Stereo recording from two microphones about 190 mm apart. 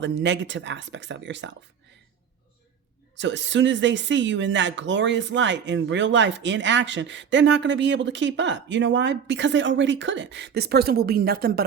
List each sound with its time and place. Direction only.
0.0 s speech: 70° right (ahead or behind)
3.2 s speech: 70° right (ahead or behind); by 11.6 s 55° right (ahead or behind)